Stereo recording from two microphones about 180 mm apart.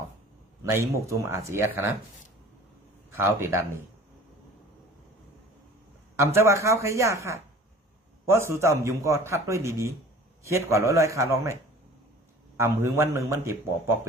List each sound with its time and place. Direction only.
0.6 s a man's voice: 15° right (ahead or behind)
3.1 s a man's voice: 15° right (ahead or behind)
6.1 s a man's voice: 15° right (ahead or behind)
12.5 s a man's voice: 15° right (ahead or behind)